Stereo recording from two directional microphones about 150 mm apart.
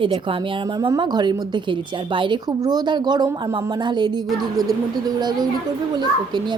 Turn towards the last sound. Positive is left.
turn(degrees=-30)  # may be behind; listen again after turning